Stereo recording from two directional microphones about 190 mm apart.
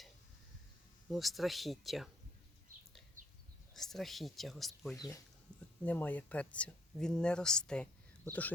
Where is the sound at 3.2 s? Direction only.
45° right (ahead or behind).